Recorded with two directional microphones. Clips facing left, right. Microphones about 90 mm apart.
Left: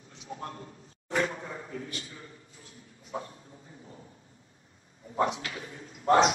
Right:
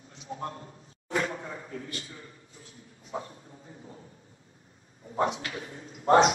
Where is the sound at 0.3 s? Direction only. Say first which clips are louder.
Right 3 dB; 30° right (ahead or behind).